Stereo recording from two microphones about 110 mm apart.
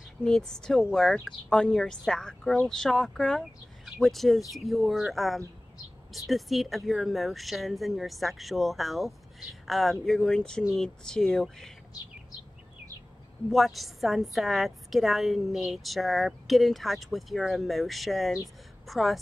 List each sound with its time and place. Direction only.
0.2 s a woman's voice: 5° left (ahead or behind)
13.5 s a woman's voice: centre (ahead or behind)